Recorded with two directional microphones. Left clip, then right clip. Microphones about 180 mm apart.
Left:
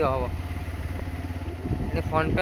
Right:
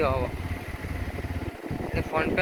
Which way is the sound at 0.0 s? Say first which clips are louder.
Left 1 dB; 15° left (ahead or behind).